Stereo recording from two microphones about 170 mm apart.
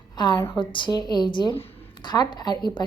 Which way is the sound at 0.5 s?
30° left (ahead or behind).